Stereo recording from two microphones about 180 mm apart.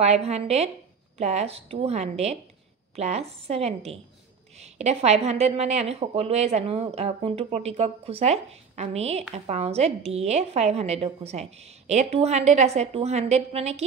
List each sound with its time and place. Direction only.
0.0 s a woman's voice: 35° right (ahead or behind)